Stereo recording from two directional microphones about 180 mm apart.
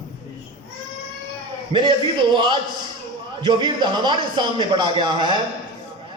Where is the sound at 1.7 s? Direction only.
25° right (ahead or behind).